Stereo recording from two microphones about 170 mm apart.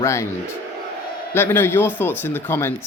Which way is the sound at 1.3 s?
15° left (ahead or behind).